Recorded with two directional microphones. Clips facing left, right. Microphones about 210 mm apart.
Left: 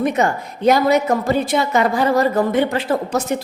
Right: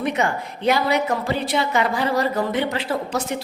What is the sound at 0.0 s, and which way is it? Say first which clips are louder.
A woman's voice: left 4 dB; 45° left (ahead or behind).